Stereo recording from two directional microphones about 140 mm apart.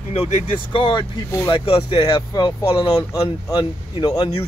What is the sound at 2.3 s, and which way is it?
Speech, 25° left (ahead or behind).